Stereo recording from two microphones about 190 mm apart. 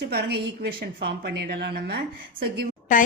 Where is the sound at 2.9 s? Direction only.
45° left (ahead or behind).